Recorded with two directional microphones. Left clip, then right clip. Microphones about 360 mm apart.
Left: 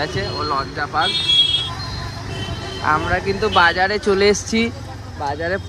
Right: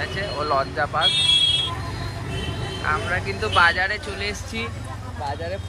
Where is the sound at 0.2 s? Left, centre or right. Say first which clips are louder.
Left 1 dB; centre.